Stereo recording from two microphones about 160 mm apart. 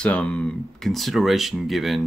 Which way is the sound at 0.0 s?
10° left (ahead or behind).